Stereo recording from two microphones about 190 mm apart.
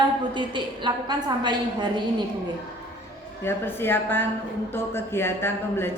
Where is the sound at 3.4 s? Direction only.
10° left (ahead or behind).